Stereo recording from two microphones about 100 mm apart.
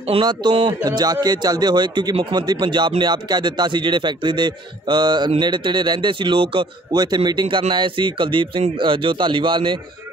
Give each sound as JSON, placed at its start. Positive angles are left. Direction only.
{"t": 0.2, "sound": "a man's voice", "side_deg": -45}
{"t": 6.9, "sound": "a man's voice", "side_deg": -40}